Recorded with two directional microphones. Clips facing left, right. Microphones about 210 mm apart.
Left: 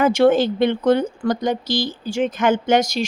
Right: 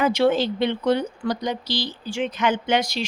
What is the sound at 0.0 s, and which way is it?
Speech, 50° left (ahead or behind).